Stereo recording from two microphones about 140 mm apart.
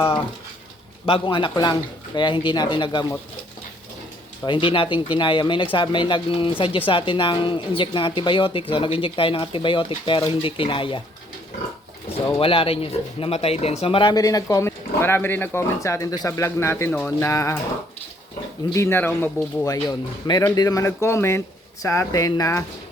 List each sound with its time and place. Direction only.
1.0 s speech: 40° left (ahead or behind)
4.4 s speech: 35° left (ahead or behind)
12.0 s speech: 40° left (ahead or behind); by 17.6 s 20° left (ahead or behind)
18.7 s a man's voice: 20° left (ahead or behind)
19.6 s speech: 25° left (ahead or behind)